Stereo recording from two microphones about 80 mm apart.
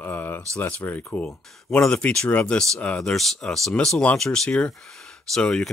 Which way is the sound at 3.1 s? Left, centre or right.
Centre.